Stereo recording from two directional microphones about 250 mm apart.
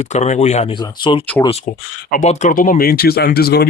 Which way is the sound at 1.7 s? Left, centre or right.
Left.